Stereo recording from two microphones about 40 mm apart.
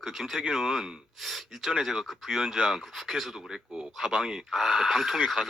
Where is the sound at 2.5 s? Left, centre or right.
Centre.